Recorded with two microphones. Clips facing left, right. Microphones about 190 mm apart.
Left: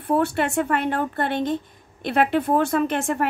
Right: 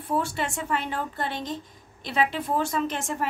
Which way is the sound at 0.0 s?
60° left (ahead or behind).